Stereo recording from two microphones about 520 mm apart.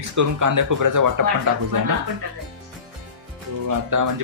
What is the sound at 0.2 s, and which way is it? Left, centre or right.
Speech, right.